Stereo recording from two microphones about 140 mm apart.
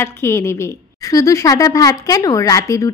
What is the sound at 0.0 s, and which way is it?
A woman's voice, 15° left (ahead or behind).